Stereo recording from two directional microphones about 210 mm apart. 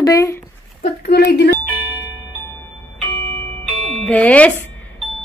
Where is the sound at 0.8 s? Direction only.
50° left (ahead or behind).